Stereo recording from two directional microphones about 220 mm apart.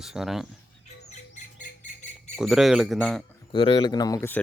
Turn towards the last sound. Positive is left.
turn(degrees=10)  # may be behind; listen again after turning